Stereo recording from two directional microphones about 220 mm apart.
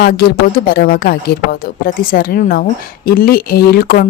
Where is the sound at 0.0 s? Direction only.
45° left (ahead or behind).